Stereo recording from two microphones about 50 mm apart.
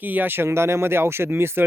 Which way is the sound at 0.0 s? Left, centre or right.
Right.